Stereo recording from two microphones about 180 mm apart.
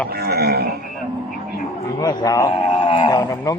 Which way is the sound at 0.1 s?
60° right (ahead or behind).